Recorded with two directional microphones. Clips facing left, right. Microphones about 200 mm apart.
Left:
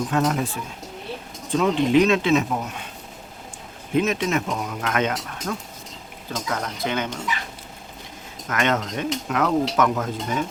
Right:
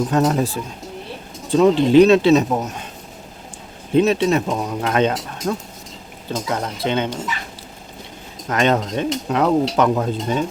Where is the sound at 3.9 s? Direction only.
30° right (ahead or behind).